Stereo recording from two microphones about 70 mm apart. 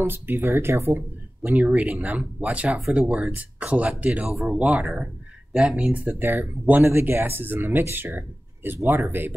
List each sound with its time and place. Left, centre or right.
0.0 s speech: right
1.6 s speech: centre
4.3 s speech: centre
4.6 s speech: centre; by 9.3 s right